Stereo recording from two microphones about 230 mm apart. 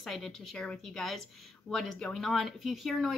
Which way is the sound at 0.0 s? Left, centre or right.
Centre.